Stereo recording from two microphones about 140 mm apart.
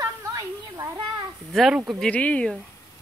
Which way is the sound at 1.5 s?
Centre (ahead or behind).